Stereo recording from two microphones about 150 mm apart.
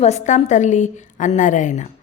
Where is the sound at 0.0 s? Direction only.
45° left (ahead or behind).